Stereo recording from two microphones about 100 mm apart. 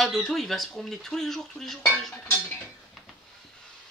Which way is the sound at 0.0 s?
Centre (ahead or behind).